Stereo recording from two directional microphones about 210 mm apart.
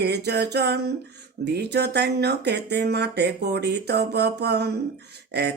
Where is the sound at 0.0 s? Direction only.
50° right (ahead or behind).